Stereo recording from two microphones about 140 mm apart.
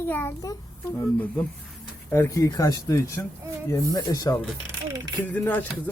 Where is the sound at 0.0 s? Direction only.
15° left (ahead or behind).